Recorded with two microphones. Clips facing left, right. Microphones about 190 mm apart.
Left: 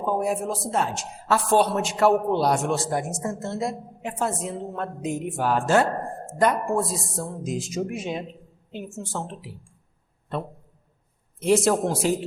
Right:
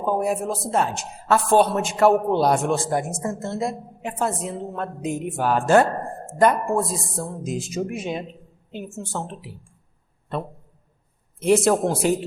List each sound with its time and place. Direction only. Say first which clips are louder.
0.2 s a woman's voice: right 2 dB; 60° right (ahead or behind)